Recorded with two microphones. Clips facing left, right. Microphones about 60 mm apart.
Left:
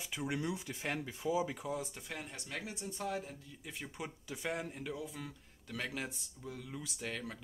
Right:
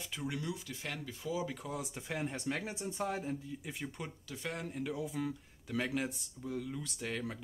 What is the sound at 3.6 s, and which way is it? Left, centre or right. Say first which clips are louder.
Speech: right 2 dB; centre.